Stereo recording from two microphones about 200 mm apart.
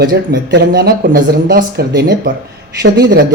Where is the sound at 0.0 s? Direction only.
55° right (ahead or behind).